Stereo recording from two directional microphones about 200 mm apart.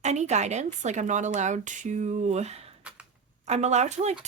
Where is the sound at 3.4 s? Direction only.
35° right (ahead or behind).